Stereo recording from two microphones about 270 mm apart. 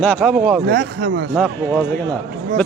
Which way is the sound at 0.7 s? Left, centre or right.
Right.